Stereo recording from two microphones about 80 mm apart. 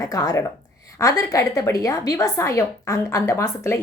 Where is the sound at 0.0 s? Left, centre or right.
Left.